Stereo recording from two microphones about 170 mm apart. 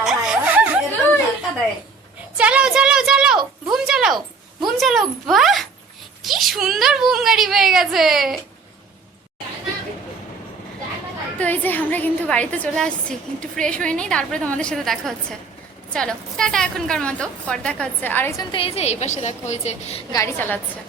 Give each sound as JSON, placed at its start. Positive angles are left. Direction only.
{"t": 0.0, "sound": "a sound", "side_deg": -5}
{"t": 2.4, "sound": "a woman's voice", "side_deg": -5}
{"t": 11.3, "sound": "a woman's voice", "side_deg": 10}
{"t": 18.5, "sound": "a woman's voice", "side_deg": 35}
{"t": 20.1, "sound": "a woman's voice", "side_deg": 15}